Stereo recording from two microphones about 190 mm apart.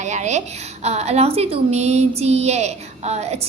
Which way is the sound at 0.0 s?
40° right (ahead or behind).